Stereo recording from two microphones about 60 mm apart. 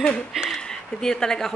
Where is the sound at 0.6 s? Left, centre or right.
Centre.